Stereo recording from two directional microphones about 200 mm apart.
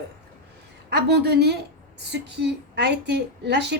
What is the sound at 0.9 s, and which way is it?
A woman's voice, 55° right (ahead or behind).